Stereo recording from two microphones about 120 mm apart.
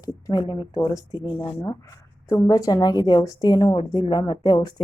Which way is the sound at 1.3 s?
50° left (ahead or behind).